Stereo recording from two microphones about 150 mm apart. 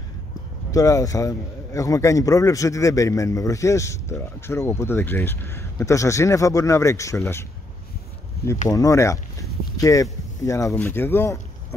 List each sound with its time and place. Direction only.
0.7 s a man's voice: 20° left (ahead or behind)
8.6 s speech: 20° left (ahead or behind)